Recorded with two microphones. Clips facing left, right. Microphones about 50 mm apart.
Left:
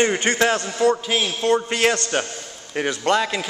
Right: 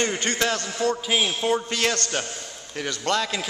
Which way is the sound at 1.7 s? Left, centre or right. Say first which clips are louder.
Left 5 dB; centre.